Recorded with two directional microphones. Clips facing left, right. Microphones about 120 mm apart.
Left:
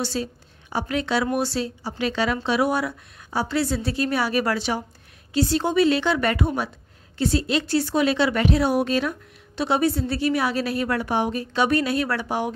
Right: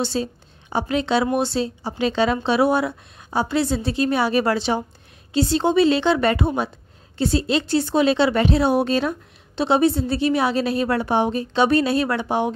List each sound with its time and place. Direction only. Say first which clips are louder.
0.0 s a woman's voice: right 3 dB; 25° right (ahead or behind)